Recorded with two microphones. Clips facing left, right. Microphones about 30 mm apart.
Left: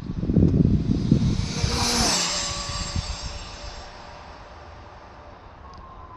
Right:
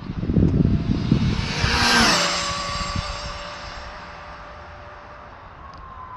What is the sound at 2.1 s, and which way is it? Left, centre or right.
Vehicle, right.